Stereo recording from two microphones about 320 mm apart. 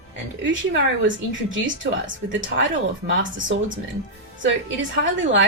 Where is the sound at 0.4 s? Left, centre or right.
Right.